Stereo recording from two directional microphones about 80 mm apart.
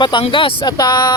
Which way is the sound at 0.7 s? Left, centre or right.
Left.